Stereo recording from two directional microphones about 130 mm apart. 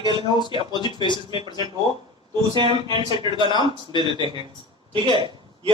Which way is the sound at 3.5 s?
40° left (ahead or behind).